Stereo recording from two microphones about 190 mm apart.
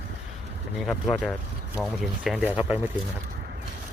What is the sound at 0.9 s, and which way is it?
Speech, 5° left (ahead or behind).